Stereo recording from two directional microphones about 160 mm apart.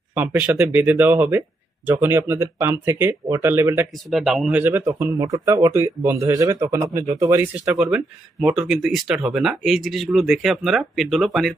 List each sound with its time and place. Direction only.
0.1 s speech: 10° right (ahead or behind)
4.1 s speech: centre (ahead or behind)
4.9 s speech: 25° right (ahead or behind)
7.6 s speech: 5° right (ahead or behind)